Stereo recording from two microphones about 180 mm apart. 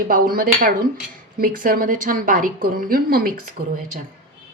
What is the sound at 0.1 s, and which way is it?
A woman's voice, 50° right (ahead or behind).